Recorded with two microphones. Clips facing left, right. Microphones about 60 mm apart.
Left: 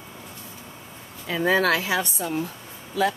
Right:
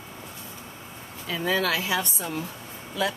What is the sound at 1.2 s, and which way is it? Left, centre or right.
A woman's voice, left.